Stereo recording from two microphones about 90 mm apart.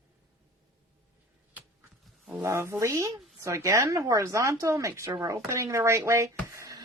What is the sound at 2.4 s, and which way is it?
A woman's voice, 30° right (ahead or behind).